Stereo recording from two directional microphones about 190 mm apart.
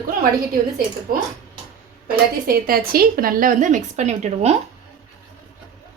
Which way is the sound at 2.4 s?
50° right (ahead or behind).